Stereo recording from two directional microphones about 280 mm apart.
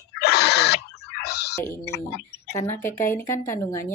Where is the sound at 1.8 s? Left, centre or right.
Left.